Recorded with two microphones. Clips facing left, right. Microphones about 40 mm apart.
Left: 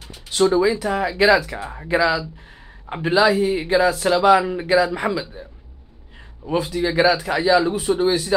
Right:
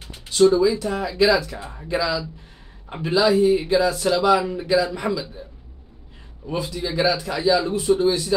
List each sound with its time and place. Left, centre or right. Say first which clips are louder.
0.3 s music: right 2 dB; left
0.7 s speech: left 2 dB; centre
3.3 s speech: right 1 dB; centre
6.4 s speech: left 5 dB; centre